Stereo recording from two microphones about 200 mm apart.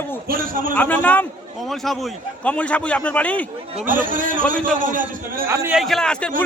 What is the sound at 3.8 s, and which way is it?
A man's voice, 45° right (ahead or behind).